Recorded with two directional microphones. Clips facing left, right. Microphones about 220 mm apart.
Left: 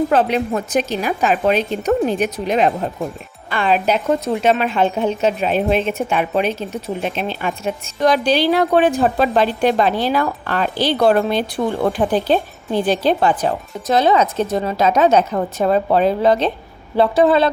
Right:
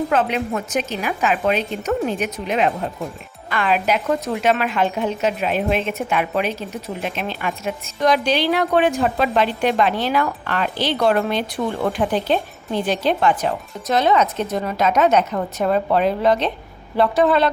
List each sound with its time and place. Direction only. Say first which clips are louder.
0.1 s a woman's voice: left 3 dB; 35° left (ahead or behind)